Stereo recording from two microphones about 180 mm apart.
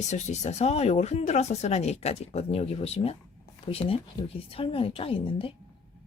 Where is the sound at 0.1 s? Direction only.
40° left (ahead or behind).